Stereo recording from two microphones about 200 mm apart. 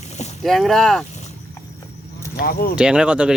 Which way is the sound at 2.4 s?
45° left (ahead or behind).